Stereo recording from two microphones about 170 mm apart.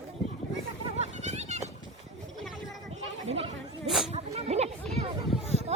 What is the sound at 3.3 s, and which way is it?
Chatter, 40° right (ahead or behind).